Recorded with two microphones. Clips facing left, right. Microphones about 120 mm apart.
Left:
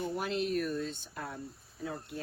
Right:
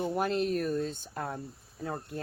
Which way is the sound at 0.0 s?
50° right (ahead or behind).